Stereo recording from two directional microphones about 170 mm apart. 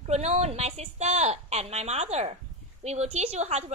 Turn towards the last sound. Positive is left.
turn(degrees=-40)  # may be behind; listen again after turning